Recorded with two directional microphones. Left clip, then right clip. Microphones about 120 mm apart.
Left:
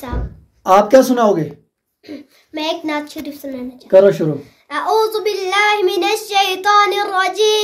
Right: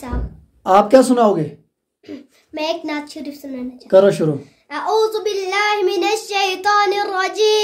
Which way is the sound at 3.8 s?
5° left (ahead or behind).